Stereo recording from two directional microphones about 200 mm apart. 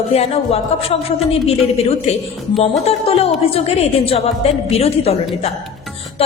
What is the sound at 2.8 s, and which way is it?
A woman's voice, 30° left (ahead or behind).